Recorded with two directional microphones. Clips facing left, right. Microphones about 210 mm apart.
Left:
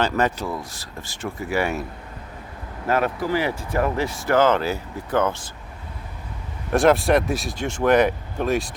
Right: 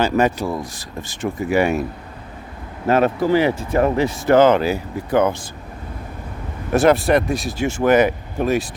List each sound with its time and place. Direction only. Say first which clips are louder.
0.0 s speech: right 4 dB; 10° right (ahead or behind)
2.8 s speech: right 6 dB; 25° right (ahead or behind)
6.7 s speech: right 2 dB; centre (ahead or behind)